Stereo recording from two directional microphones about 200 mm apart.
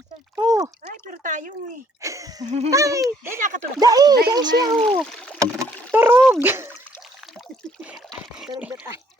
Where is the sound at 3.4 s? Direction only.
40° right (ahead or behind).